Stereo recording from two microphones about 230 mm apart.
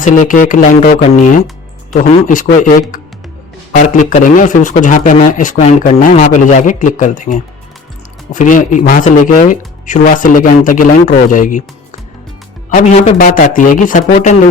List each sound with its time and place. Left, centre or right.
0.0 s speech: left
12.7 s speech: left